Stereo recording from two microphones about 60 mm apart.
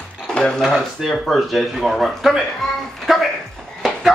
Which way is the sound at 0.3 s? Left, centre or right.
Centre.